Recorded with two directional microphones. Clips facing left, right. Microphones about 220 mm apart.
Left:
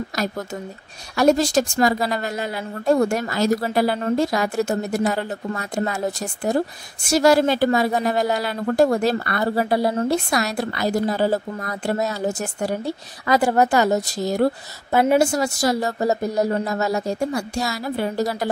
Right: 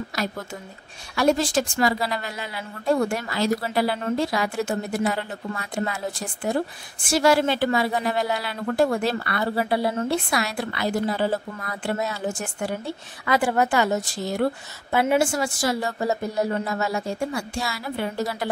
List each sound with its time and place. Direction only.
1.1 s a woman's voice: 40° left (ahead or behind)